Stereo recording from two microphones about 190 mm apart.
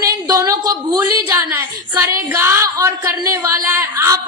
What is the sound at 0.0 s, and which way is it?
A woman's voice, 20° right (ahead or behind).